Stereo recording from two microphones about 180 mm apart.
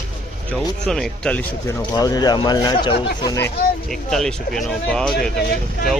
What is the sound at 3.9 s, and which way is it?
Speech, centre (ahead or behind).